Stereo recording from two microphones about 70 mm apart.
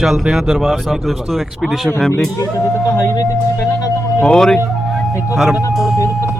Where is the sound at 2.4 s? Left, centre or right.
Left.